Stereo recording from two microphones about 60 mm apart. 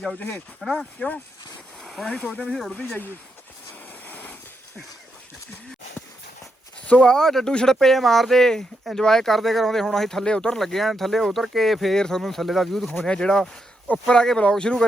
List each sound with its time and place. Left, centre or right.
0.2 s speech: left
0.6 s speech: centre
0.9 s speech: left
1.8 s a sound: centre
2.0 s speech: centre
2.3 s speech: centre
4.0 s a sound: left
6.8 s speech: centre
10.6 s speech: centre
13.1 s speech: centre